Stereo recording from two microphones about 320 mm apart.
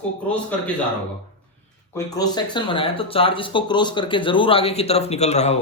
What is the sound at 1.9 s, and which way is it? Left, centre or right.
Speech, centre.